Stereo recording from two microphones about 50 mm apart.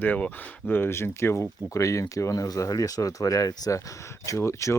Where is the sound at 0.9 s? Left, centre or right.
Left.